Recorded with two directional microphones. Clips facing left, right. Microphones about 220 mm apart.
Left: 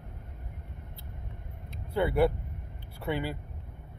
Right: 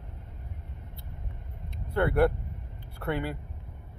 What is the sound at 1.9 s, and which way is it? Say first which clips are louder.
Speech: right 1 dB; 5° left (ahead or behind).